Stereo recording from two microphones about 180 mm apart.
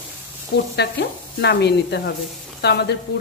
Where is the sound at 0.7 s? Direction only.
70° left (ahead or behind).